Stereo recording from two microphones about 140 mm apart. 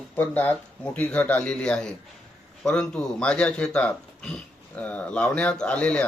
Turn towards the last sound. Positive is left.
turn(degrees=10)  # may be behind; listen again after turning